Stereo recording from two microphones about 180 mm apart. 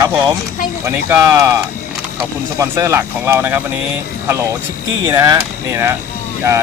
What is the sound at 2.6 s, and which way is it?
Speech, 15° right (ahead or behind).